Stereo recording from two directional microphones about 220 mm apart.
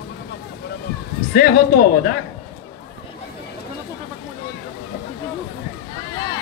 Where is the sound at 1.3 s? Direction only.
45° left (ahead or behind).